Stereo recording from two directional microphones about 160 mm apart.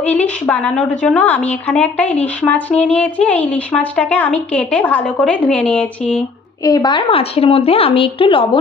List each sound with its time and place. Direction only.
0.0 s speech: 10° left (ahead or behind)
6.6 s a woman's voice: 25° left (ahead or behind)